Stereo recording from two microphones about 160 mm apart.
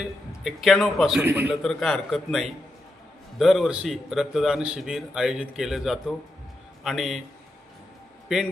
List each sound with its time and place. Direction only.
0.0 s a man's voice: centre (ahead or behind)
1.2 s a man's voice: 10° right (ahead or behind)
1.6 s a man's voice: centre (ahead or behind)